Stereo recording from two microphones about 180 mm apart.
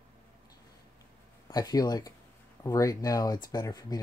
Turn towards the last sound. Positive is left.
turn(degrees=20)  # may be behind; listen again after turning